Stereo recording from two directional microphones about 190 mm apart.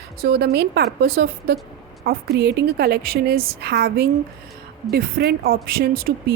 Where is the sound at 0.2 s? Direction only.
60° right (ahead or behind).